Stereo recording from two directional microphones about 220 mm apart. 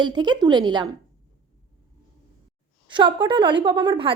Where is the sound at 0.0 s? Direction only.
20° right (ahead or behind).